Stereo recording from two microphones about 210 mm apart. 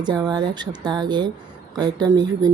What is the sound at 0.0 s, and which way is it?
A woman's voice, 20° right (ahead or behind).